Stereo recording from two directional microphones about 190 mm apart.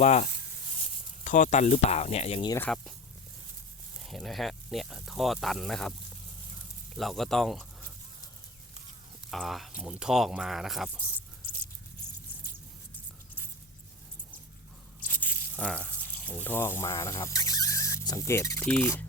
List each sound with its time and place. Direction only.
0.0 s speech: 35° left (ahead or behind)
2.5 s speech: 10° left (ahead or behind)
4.0 s speech: centre (ahead or behind)
6.9 s speech: centre (ahead or behind)
9.3 s speech: centre (ahead or behind)
15.0 s speech: 10° left (ahead or behind)